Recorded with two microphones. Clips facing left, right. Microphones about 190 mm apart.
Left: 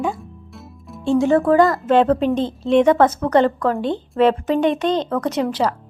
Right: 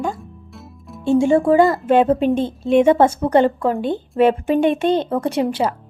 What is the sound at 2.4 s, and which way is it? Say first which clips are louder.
Speech: even; 50° right (ahead or behind).